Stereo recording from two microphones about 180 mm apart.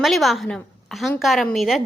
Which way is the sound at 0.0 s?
Centre (ahead or behind).